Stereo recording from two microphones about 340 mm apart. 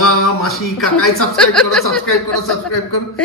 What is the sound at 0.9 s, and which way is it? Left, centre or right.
Speech, left.